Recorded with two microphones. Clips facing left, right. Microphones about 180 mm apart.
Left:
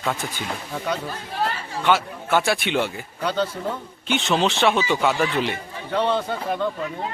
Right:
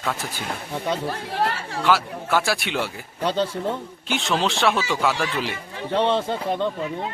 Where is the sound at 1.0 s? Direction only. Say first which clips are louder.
Right 2 dB; 65° right (ahead or behind).